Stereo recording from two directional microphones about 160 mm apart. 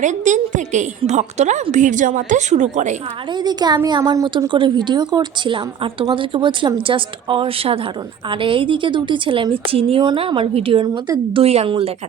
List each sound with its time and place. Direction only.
0.0 s a woman's voice: 50° right (ahead or behind)
3.3 s a woman's voice: 25° right (ahead or behind)